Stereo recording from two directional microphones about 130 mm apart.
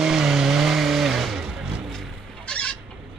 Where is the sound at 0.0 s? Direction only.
5° right (ahead or behind).